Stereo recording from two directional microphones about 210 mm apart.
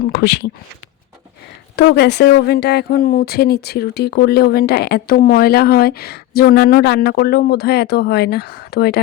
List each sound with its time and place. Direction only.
0.0 s speech: 50° left (ahead or behind)
1.7 s speech: 50° left (ahead or behind)